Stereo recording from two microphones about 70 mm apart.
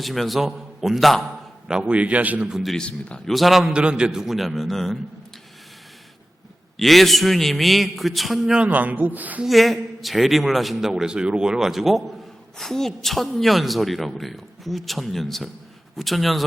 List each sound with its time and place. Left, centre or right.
0.0 s a man's voice: centre; by 2.5 s right
2.5 s a man's voice: centre
2.7 s a man's voice: centre
3.3 s a man's voice: centre
3.7 s a man's voice: centre
6.7 s a man's voice: centre
8.5 s a man's voice: centre
9.4 s a man's voice: centre